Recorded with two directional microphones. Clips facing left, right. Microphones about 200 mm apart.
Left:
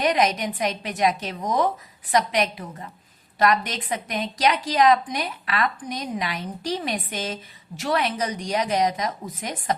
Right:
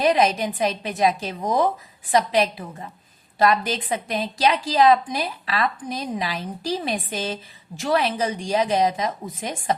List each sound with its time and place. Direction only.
0.0 s a woman's voice: 30° right (ahead or behind)